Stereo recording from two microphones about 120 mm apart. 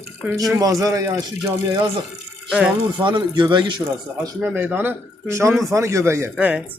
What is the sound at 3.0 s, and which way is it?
Speech, 40° right (ahead or behind).